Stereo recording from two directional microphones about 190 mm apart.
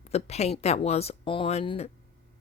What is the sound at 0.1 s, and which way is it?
Speech, 35° left (ahead or behind).